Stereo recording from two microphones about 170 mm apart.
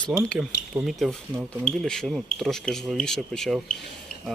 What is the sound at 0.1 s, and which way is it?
Speech, 5° right (ahead or behind).